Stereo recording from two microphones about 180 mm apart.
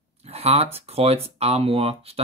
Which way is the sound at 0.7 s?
35° right (ahead or behind).